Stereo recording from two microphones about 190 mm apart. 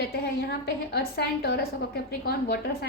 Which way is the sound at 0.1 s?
55° left (ahead or behind).